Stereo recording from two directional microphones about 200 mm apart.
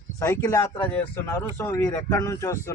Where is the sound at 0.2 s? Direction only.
15° left (ahead or behind).